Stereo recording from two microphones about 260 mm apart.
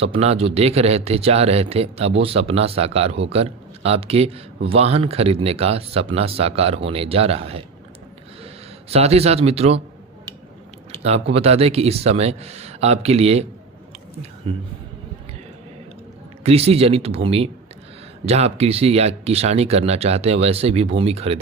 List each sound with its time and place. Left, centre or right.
0.0 s speech: right
8.9 s speech: right
11.0 s speech: right
16.4 s speech: right